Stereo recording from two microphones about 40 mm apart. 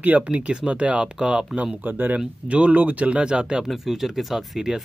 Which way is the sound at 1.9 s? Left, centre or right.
Right.